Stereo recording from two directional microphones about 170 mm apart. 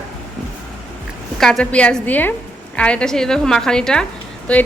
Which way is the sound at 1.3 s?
5° left (ahead or behind).